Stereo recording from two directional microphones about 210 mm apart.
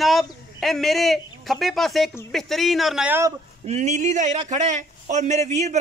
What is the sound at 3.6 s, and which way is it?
A man's voice, 35° right (ahead or behind).